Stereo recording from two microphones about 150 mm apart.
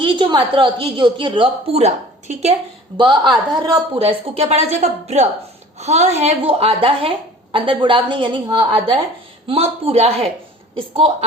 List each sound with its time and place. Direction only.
0.0 s a woman's voice: 35° right (ahead or behind)
3.0 s a woman's voice: 30° right (ahead or behind)